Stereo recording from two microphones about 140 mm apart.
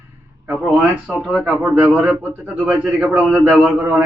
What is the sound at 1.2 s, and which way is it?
Speech, 5° left (ahead or behind).